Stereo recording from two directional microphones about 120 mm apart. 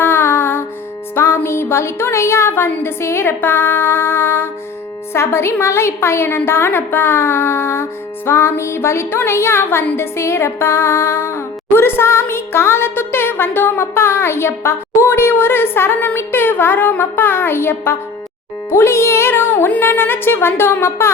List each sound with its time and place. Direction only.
0.0 s music: 20° left (ahead or behind)